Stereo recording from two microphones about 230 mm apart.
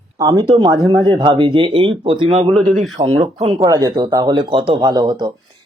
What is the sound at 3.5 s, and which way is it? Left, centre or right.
Speech, centre.